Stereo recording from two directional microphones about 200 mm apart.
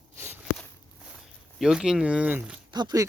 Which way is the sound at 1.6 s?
5° right (ahead or behind).